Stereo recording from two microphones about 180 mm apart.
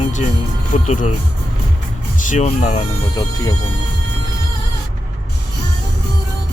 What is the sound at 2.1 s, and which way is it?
Speech, 45° left (ahead or behind).